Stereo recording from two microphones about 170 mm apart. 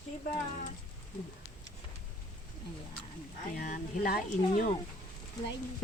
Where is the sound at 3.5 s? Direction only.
55° left (ahead or behind).